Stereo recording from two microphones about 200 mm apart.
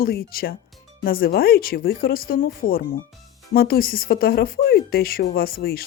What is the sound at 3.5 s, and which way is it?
Speech, 50° left (ahead or behind).